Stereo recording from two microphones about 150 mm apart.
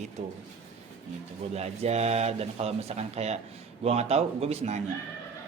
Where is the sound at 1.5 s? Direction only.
45° right (ahead or behind).